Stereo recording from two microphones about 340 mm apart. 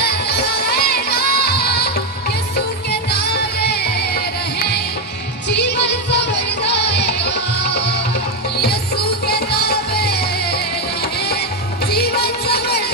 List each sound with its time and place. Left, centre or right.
0.0 s music: left
3.1 s music: left
11.9 s music: left